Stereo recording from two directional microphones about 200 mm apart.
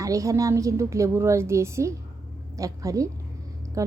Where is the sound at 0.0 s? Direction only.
15° right (ahead or behind).